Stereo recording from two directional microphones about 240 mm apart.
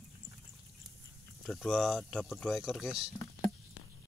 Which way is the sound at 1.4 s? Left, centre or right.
Centre.